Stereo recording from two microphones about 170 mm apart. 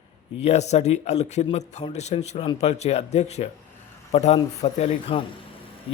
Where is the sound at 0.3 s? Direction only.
40° left (ahead or behind).